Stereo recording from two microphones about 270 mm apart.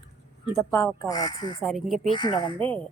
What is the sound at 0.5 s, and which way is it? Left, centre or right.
Speech, centre.